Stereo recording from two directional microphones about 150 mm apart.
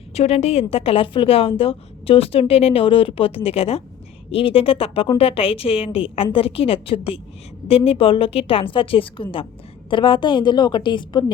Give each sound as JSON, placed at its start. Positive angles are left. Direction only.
{"t": 0.1, "sound": "a woman's voice", "side_deg": 45}